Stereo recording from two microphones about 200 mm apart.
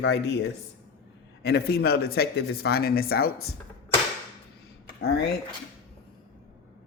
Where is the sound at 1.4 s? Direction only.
50° left (ahead or behind).